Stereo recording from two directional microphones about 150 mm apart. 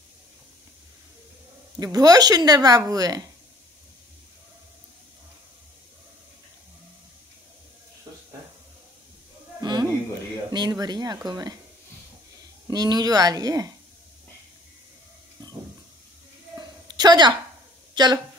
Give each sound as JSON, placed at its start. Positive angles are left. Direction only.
{"t": 1.8, "sound": "a woman's voice", "side_deg": -25}
{"t": 9.6, "sound": "a sound", "side_deg": -30}
{"t": 10.5, "sound": "a woman's voice", "side_deg": -25}
{"t": 12.6, "sound": "a woman's voice", "side_deg": -25}
{"t": 16.5, "sound": "a sound", "side_deg": -30}
{"t": 17.9, "sound": "speech", "side_deg": -30}